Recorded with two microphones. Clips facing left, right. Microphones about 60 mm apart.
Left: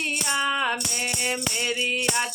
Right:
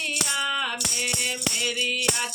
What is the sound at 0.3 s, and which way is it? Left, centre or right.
Music, left.